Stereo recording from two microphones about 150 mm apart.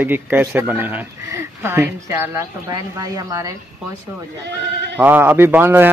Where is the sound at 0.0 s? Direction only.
10° right (ahead or behind).